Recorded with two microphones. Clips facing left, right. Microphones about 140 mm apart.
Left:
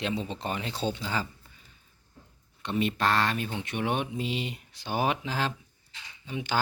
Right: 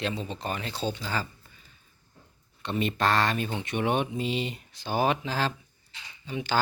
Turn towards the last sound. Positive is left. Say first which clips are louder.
# right 2 dB
turn(degrees=10)  # may be behind; listen again after turning